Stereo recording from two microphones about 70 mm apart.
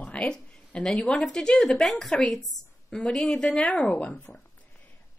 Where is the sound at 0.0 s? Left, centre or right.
Centre.